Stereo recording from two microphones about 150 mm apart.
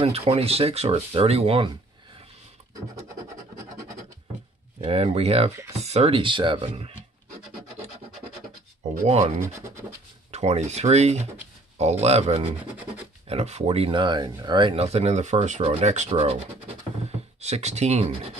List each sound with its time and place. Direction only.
0.0 s speech: 40° right (ahead or behind)
4.8 s speech: 40° right (ahead or behind)
9.4 s speech: 20° right (ahead or behind)
10.3 s speech: 50° right (ahead or behind)
17.4 s speech: 45° right (ahead or behind)